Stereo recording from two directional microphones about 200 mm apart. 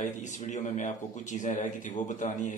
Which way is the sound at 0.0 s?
35° left (ahead or behind).